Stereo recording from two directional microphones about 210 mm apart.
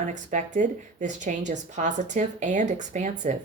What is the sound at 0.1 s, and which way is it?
Speech, 35° right (ahead or behind).